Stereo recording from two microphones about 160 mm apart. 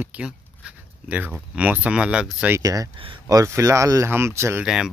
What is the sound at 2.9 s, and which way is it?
Speech, 35° right (ahead or behind).